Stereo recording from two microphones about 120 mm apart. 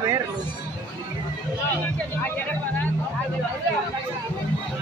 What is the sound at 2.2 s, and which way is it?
Speech, 15° left (ahead or behind).